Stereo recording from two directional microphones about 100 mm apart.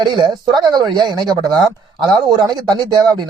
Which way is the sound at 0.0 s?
50° right (ahead or behind).